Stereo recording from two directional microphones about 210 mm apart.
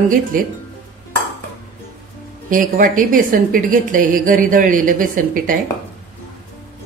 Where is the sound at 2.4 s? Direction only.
40° right (ahead or behind).